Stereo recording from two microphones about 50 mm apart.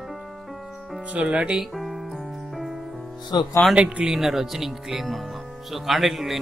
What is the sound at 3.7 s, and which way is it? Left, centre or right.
Speech, right.